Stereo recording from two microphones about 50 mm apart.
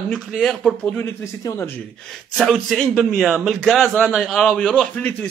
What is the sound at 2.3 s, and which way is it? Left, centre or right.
A man's voice, centre.